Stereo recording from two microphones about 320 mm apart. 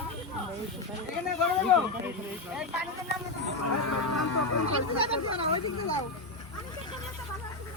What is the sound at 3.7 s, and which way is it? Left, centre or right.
Speech, left.